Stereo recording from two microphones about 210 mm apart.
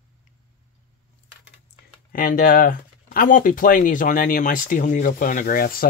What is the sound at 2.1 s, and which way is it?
Speech, 40° left (ahead or behind).